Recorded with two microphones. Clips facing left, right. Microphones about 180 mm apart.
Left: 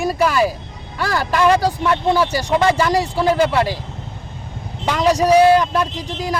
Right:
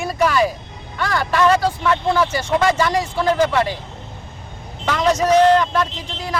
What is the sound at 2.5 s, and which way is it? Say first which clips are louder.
Speech: left 2 dB; 20° left (ahead or behind).